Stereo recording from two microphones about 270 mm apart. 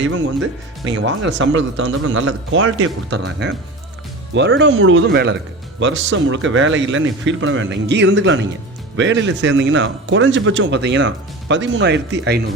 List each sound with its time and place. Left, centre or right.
0.9 s a man's voice: right